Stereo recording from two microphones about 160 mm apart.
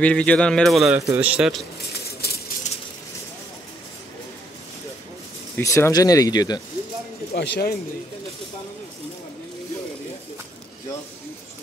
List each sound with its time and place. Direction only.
0.0 s speech: 10° left (ahead or behind)
0.9 s speech: 10° right (ahead or behind)
2.2 s a sound: 80° left
5.6 s speech: 20° left (ahead or behind)
7.3 s speech: 90° left